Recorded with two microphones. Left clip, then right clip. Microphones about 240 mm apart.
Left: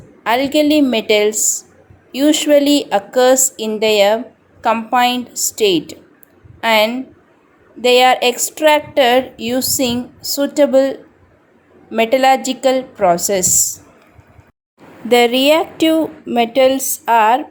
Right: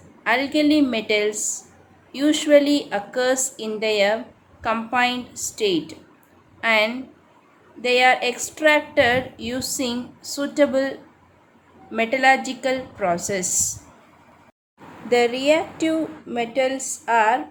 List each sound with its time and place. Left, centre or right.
0.2 s a woman's voice: left
15.1 s a woman's voice: left